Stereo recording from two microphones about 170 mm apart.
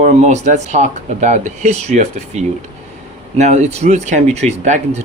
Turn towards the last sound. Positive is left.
turn(degrees=-45)  # may be behind; listen again after turning